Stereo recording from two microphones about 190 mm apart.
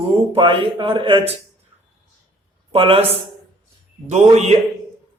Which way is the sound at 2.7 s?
30° right (ahead or behind).